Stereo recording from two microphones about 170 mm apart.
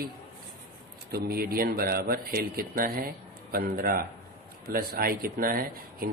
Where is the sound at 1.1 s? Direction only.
65° right (ahead or behind).